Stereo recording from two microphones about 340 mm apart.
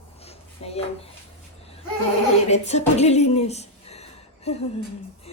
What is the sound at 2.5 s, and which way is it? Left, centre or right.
Speech, centre.